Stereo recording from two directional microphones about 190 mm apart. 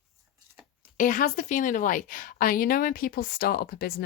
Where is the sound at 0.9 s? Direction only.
45° left (ahead or behind).